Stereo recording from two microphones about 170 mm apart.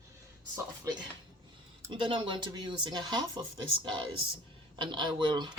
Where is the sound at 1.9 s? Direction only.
30° right (ahead or behind).